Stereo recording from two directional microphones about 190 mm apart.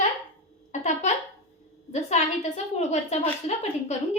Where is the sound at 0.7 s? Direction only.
40° left (ahead or behind).